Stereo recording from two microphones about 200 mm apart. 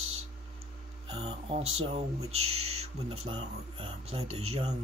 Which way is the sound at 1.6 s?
90° right.